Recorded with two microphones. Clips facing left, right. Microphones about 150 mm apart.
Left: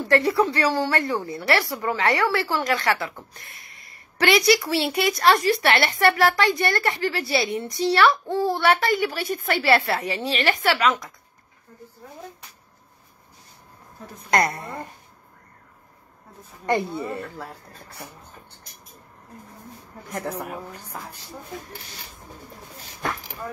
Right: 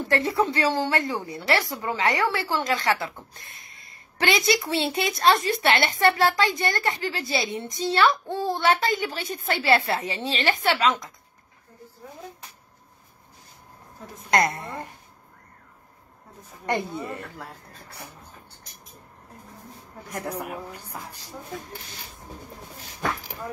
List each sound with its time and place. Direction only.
0.1 s a woman's voice: 20° right (ahead or behind)
14.3 s a woman's voice: 25° right (ahead or behind)
16.9 s speech: 10° left (ahead or behind)
20.2 s a woman's voice: 10° right (ahead or behind)